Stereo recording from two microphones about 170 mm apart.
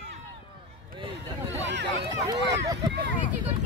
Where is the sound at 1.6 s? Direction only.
90° right.